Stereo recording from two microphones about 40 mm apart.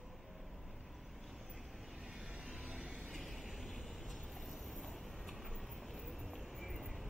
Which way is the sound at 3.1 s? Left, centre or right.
Centre.